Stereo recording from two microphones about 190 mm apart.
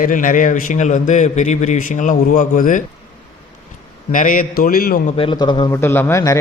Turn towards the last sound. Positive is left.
turn(degrees=15)  # may be behind; listen again after turning